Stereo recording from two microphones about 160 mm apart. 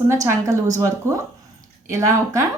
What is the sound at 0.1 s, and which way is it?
A woman's voice, 20° right (ahead or behind).